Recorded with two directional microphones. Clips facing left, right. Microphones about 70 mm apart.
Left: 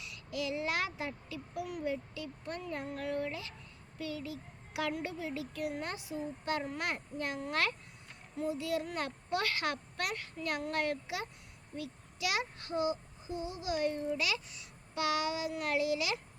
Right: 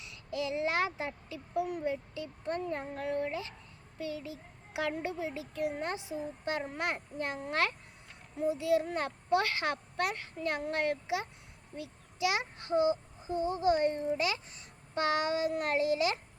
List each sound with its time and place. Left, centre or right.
0.0 s a child's voice: right